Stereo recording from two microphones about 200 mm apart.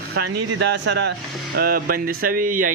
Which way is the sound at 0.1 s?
55° right (ahead or behind).